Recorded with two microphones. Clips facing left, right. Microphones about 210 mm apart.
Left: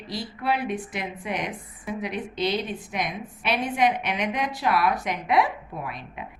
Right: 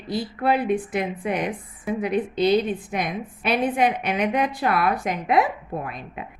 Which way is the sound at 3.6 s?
55° right (ahead or behind).